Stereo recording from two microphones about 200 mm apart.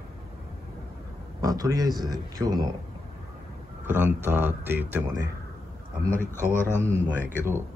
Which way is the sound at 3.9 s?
10° right (ahead or behind).